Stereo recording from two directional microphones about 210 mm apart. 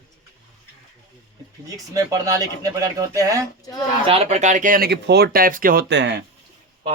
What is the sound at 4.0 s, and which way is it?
Speech, 25° right (ahead or behind).